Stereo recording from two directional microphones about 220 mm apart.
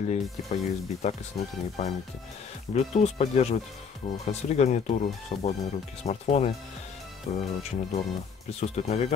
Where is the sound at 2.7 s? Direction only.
30° left (ahead or behind).